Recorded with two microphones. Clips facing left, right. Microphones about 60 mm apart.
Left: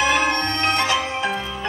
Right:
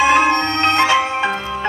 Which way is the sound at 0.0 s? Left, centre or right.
Right.